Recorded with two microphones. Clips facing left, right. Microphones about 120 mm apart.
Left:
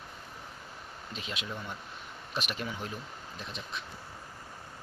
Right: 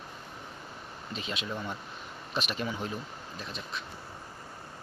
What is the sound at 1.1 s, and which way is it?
Speech, 10° left (ahead or behind).